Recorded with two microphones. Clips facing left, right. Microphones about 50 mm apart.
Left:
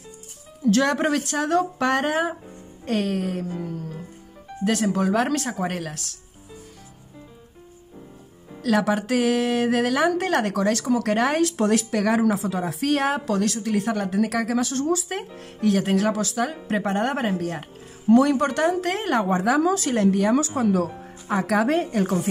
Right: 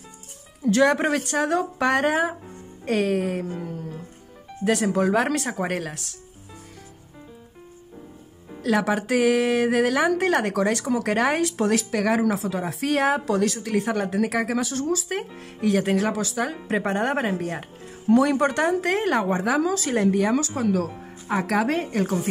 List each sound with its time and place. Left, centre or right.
0.7 s speech: centre
3.4 s music: centre
4.9 s speech: centre
5.8 s speech: centre
8.5 s speech: centre
15.6 s speech: centre
18.1 s speech: centre
18.4 s speech: right; by 19.6 s centre
19.6 s speech: centre
19.9 s speech: centre
20.3 s speech: centre
21.3 s speech: centre